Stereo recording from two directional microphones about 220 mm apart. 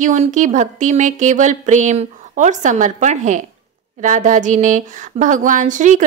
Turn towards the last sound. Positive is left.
turn(degrees=-35)  # may be behind; listen again after turning